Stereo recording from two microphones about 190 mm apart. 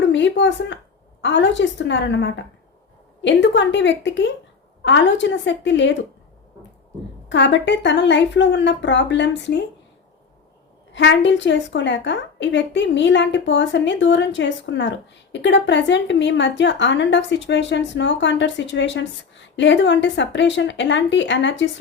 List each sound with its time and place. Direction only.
0.1 s a woman's voice: 70° left (ahead or behind)
7.3 s a woman's voice: 70° left (ahead or behind)
10.9 s a woman's voice: 70° left (ahead or behind)